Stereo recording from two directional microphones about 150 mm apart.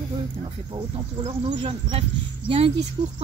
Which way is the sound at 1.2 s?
40° right (ahead or behind).